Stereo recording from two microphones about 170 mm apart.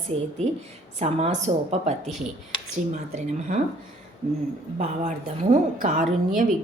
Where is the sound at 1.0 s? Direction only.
40° right (ahead or behind).